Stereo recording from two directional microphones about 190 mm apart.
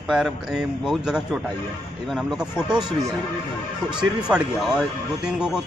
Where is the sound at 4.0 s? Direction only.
5° right (ahead or behind).